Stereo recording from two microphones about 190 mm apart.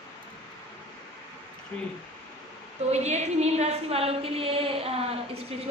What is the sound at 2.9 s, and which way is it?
A woman's voice, 35° right (ahead or behind).